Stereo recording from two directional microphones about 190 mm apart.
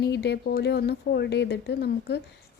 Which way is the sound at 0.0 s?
60° left (ahead or behind).